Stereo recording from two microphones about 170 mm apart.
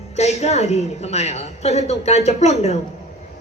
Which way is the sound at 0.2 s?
40° left (ahead or behind).